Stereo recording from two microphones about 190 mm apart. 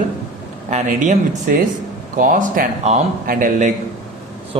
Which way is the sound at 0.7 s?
40° right (ahead or behind).